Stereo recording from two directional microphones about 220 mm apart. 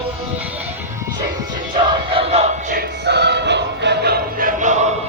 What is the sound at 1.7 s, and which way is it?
Music, 25° right (ahead or behind).